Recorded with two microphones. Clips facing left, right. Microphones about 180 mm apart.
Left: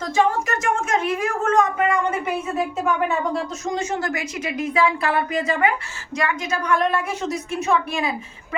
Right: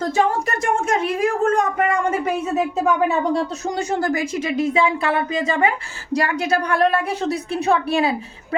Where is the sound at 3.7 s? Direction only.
30° right (ahead or behind).